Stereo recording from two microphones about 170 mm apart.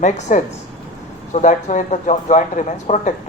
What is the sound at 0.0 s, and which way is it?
A woman's voice, 45° left (ahead or behind).